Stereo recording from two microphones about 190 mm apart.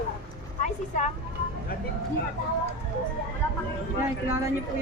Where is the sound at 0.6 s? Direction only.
40° left (ahead or behind).